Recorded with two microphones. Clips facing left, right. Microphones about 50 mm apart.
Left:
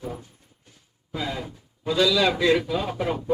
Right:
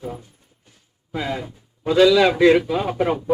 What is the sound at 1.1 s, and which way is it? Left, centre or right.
A man's voice, right.